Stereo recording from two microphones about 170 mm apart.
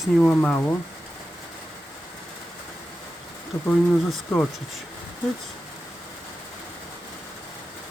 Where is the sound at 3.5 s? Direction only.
15° left (ahead or behind).